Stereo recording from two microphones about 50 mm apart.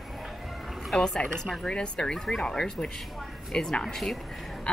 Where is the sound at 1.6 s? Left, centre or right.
Centre.